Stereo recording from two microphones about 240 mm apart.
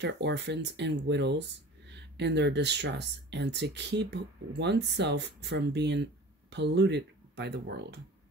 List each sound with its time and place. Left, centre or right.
0.0 s speech: right